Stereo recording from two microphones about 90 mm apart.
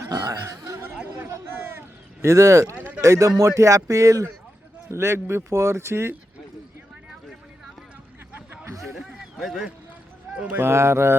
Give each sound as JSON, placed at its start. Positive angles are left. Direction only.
{"t": 0.0, "sound": "snicker", "side_deg": -40}
{"t": 0.9, "sound": "chatter", "side_deg": -20}
{"t": 2.2, "sound": "speech", "side_deg": -35}
{"t": 2.7, "sound": "a sound", "side_deg": -20}
{"t": 3.0, "sound": "speech", "side_deg": -35}
{"t": 8.9, "sound": "a sound", "side_deg": -5}
{"t": 10.3, "sound": "speech", "side_deg": -15}
{"t": 10.6, "sound": "speech", "side_deg": -30}